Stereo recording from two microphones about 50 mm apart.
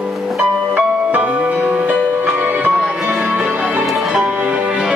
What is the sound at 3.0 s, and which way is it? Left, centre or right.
Music, right.